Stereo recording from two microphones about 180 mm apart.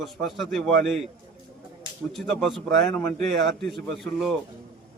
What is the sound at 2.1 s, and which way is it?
Speech, centre (ahead or behind).